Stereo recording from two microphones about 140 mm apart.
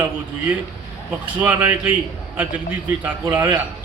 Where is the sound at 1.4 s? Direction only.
15° right (ahead or behind).